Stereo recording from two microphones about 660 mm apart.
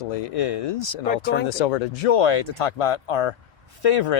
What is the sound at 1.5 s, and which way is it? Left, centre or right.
Speech, left.